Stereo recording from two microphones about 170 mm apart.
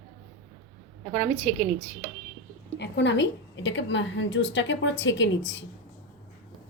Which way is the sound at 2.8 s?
90° left.